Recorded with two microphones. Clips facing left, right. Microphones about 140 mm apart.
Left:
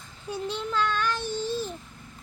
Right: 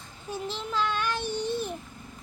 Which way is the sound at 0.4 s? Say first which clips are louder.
Left 2 dB; 5° right (ahead or behind).